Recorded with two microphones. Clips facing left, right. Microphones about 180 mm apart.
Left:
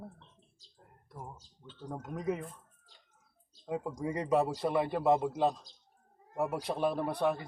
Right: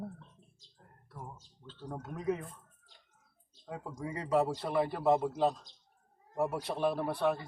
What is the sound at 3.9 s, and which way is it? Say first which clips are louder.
A man's voice: even; 20° left (ahead or behind).